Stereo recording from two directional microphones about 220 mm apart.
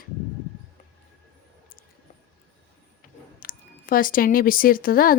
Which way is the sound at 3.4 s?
40° left (ahead or behind).